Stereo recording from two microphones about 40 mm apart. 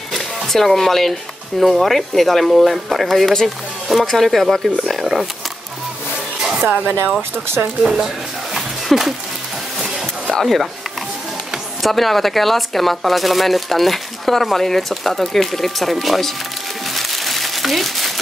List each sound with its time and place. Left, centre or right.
0.1 s speech: centre
7.2 s speech: right
7.8 s speech: centre
8.5 s a sound: centre
10.4 s speech: centre
11.8 s speech: centre
16.9 s a sound: centre